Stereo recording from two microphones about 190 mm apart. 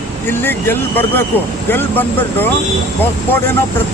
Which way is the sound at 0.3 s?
10° left (ahead or behind).